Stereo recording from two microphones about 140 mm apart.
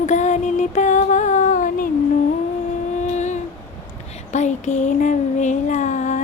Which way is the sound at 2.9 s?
55° left (ahead or behind).